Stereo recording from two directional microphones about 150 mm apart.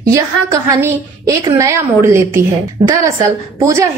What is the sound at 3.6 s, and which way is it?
Speech, 20° right (ahead or behind).